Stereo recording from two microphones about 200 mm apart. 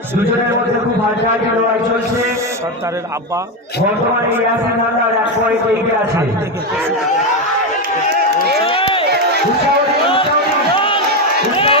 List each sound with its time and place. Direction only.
8.6 s crowd: 25° left (ahead or behind)
10.8 s crowd: 25° left (ahead or behind)